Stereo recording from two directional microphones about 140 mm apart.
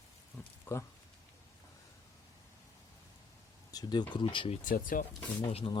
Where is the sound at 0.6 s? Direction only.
20° left (ahead or behind).